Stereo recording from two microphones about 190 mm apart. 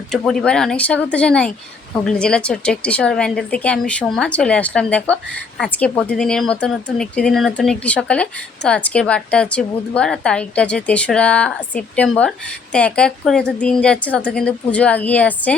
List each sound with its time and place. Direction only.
0.1 s a woman's voice: centre (ahead or behind)